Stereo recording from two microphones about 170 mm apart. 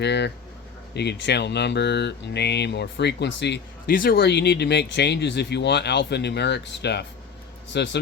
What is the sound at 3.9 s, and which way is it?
Speech, 60° left (ahead or behind).